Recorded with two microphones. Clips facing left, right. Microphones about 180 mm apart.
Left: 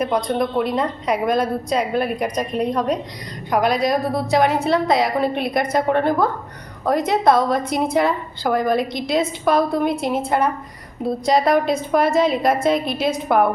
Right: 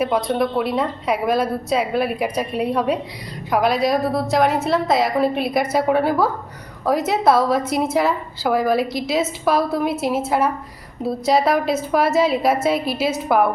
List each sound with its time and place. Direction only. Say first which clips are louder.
0.0 s a woman's voice: right 1 dB; 5° right (ahead or behind)